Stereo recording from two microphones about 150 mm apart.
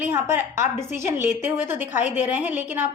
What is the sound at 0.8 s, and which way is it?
Speech, 15° right (ahead or behind).